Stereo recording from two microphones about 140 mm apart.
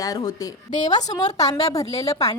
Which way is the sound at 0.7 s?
60° left (ahead or behind).